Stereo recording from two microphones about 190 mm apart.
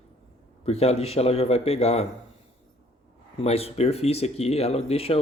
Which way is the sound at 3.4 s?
30° left (ahead or behind).